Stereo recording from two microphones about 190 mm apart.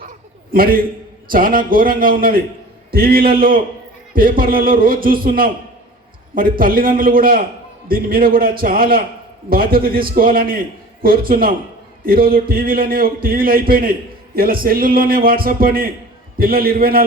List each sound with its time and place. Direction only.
0.5 s a man's voice: 50° right (ahead or behind)